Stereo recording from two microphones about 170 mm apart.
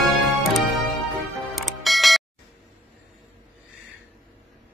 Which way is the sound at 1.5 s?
Centre (ahead or behind).